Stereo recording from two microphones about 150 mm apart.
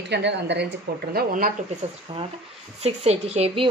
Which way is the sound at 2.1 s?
35° right (ahead or behind).